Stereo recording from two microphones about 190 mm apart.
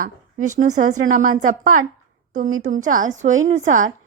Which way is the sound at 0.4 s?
40° right (ahead or behind).